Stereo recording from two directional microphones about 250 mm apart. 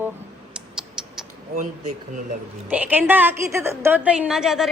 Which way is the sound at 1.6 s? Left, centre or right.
Right.